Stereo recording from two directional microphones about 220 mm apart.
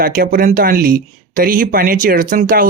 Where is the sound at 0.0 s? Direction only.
40° right (ahead or behind).